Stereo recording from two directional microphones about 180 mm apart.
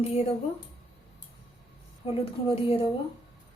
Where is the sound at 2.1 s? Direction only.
30° left (ahead or behind).